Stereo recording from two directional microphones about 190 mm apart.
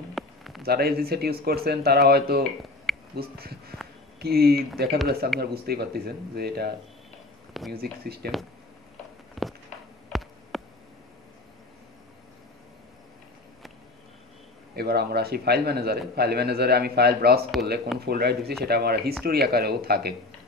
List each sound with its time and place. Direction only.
0.1 s a sound: centre (ahead or behind)
0.6 s a man's voice: 55° right (ahead or behind)
7.7 s a man's voice: 55° right (ahead or behind)
9.3 s walk: centre (ahead or behind)
10.1 s a sound: centre (ahead or behind)
14.8 s a man's voice: 55° right (ahead or behind)